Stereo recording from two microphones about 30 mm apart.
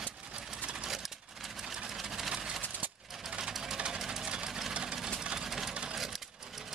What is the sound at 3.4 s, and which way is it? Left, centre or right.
Engine, centre.